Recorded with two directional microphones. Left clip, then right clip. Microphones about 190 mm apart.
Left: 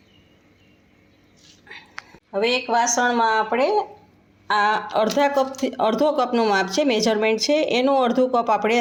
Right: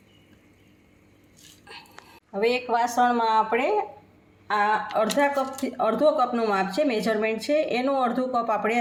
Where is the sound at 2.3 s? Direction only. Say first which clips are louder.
Left 3 dB; 45° left (ahead or behind).